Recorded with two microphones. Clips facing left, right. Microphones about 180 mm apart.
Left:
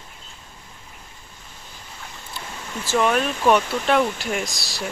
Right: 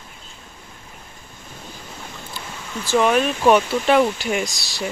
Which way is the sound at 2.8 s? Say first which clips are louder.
Right 3 dB; centre (ahead or behind).